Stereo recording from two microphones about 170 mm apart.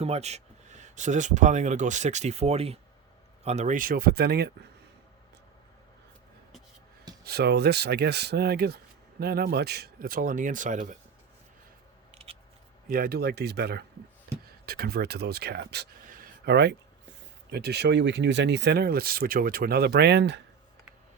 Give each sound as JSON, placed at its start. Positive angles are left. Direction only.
{"t": 0.0, "sound": "speech", "side_deg": -40}
{"t": 7.3, "sound": "speech", "side_deg": -70}
{"t": 12.1, "sound": "scissors", "side_deg": -35}
{"t": 12.9, "sound": "speech", "side_deg": -60}
{"t": 16.0, "sound": "a sound", "side_deg": -55}
{"t": 17.5, "sound": "speech", "side_deg": -75}